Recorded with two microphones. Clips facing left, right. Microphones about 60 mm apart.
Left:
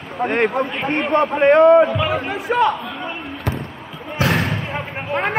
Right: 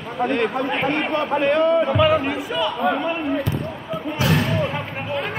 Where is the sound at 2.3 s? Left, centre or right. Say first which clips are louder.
Left 5 dB; left.